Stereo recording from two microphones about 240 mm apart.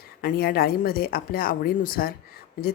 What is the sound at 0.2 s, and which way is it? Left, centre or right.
A woman's voice, left.